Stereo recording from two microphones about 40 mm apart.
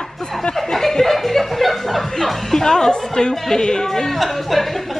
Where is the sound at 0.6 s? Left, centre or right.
Centre.